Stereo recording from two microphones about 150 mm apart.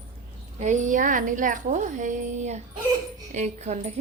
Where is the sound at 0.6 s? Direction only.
55° right (ahead or behind).